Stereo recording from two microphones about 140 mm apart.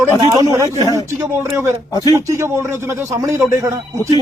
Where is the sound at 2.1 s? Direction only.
20° right (ahead or behind).